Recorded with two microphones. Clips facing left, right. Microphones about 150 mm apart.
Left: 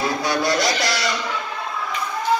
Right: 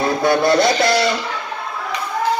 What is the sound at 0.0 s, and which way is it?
Music, 55° right (ahead or behind).